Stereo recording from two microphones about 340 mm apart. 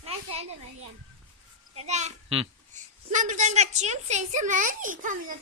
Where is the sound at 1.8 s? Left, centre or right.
Centre.